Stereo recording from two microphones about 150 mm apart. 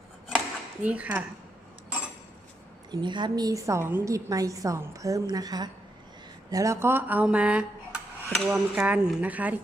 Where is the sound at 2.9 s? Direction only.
30° right (ahead or behind).